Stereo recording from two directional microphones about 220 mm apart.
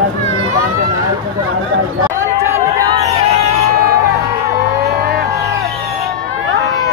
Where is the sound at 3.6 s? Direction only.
45° right (ahead or behind).